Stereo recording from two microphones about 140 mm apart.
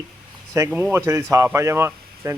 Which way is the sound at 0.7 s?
10° right (ahead or behind).